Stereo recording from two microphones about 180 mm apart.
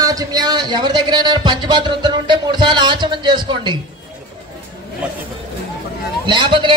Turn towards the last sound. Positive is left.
turn(degrees=-25)  # may be behind; listen again after turning